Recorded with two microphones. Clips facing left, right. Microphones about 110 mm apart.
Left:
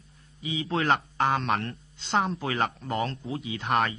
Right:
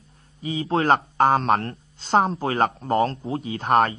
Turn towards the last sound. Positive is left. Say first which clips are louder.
# right 7 dB
turn(degrees=-40)  # may be behind; listen again after turning